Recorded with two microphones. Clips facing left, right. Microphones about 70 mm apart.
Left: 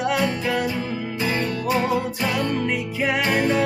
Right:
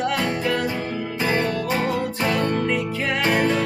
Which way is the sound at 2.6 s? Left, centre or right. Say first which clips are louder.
Even; centre.